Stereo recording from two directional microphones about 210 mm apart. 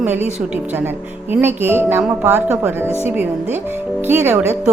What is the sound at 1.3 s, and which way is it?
A woman's voice, 10° right (ahead or behind).